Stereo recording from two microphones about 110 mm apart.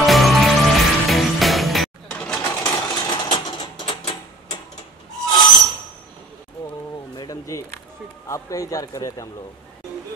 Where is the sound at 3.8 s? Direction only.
55° left (ahead or behind).